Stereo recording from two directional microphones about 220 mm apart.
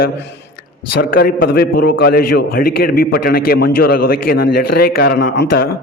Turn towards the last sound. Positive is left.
turn(degrees=50)  # may be behind; listen again after turning